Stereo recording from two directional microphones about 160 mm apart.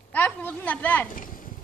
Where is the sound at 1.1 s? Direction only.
60° left (ahead or behind).